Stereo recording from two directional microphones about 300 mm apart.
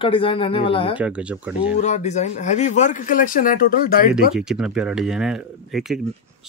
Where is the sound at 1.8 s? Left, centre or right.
Left.